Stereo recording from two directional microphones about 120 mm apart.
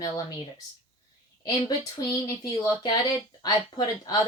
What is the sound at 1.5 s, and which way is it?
Speech, 25° left (ahead or behind).